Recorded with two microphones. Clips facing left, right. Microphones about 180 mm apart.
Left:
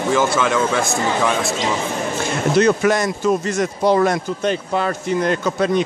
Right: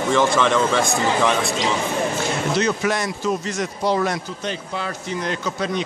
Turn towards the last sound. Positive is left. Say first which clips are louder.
# left 6 dB
turn(degrees=50)  # may be behind; listen again after turning